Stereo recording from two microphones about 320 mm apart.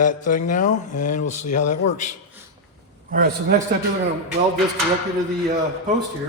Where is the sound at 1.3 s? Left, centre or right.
Left.